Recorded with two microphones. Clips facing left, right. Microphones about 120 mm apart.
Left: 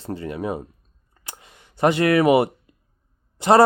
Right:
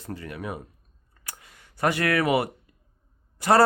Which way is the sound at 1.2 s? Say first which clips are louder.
Left 3 dB; 25° left (ahead or behind).